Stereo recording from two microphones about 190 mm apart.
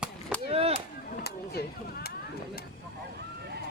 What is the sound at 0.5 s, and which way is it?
Chop, 30° right (ahead or behind).